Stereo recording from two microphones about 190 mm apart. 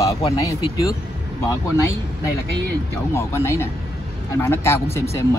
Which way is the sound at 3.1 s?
15° left (ahead or behind).